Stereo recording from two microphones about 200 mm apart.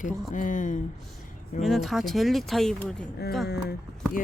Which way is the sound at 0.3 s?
40° left (ahead or behind).